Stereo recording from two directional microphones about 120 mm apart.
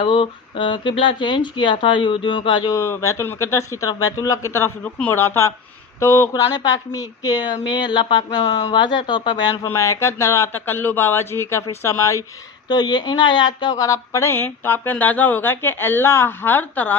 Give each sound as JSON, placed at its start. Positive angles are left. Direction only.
{"t": 0.0, "sound": "speech", "side_deg": 45}
{"t": 2.7, "sound": "speech", "side_deg": 25}
{"t": 9.6, "sound": "speech", "side_deg": 25}